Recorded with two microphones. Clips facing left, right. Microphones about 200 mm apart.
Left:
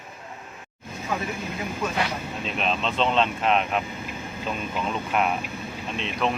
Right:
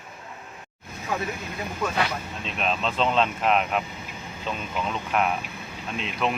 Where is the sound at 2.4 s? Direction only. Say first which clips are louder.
Even; centre (ahead or behind).